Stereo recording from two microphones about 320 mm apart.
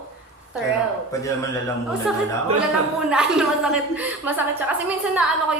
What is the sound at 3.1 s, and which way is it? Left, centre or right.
A woman's voice, centre.